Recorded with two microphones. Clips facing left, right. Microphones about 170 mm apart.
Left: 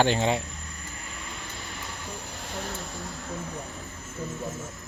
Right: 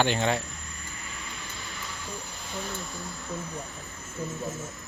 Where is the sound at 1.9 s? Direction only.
65° left (ahead or behind); by 3.0 s 85° left.